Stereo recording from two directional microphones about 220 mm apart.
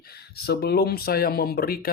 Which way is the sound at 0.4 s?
45° left (ahead or behind).